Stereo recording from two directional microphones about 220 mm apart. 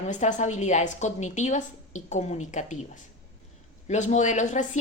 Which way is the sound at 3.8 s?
30° left (ahead or behind).